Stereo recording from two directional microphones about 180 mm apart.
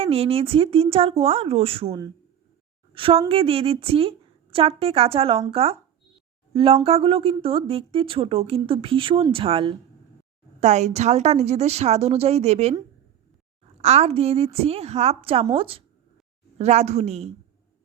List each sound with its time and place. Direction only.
0.0 s a woman's voice: 35° right (ahead or behind)
13.8 s speech: 35° right (ahead or behind)